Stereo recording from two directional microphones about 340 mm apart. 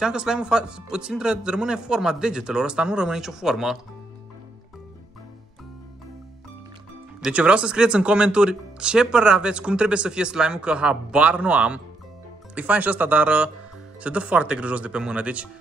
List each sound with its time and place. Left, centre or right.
0.0 s speech: centre
7.2 s speech: centre